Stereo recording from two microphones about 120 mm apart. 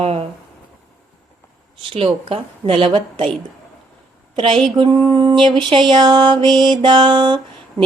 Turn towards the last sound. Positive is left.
turn(degrees=-40)  # may be behind; listen again after turning